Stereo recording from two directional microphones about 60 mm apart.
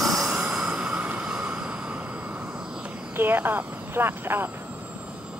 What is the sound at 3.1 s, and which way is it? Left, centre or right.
Speech, right.